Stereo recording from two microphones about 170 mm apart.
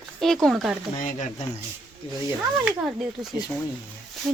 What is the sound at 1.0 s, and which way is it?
Speech, 50° left (ahead or behind).